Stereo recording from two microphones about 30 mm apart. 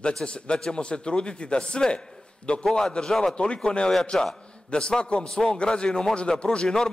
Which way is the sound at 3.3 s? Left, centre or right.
Left.